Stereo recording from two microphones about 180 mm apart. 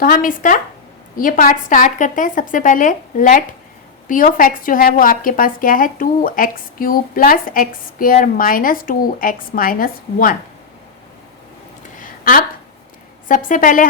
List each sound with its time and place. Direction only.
0.0 s a woman's voice: 50° left (ahead or behind)
11.9 s a sound: 50° left (ahead or behind)
13.2 s a woman's voice: 50° left (ahead or behind)